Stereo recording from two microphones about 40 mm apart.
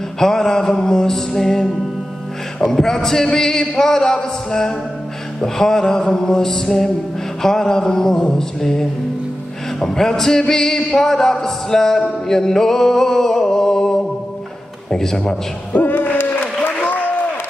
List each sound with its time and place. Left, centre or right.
0.2 s music: centre
2.7 s a man's voice: centre
12.3 s music: centre
14.9 s a man's voice: centre
15.7 s a sound: left